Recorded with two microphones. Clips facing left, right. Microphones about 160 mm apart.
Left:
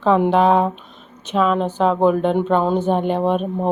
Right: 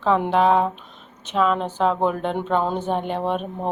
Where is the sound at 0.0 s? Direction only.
10° left (ahead or behind).